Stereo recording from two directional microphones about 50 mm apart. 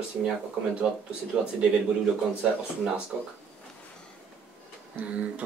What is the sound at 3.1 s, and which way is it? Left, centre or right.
Speech, centre.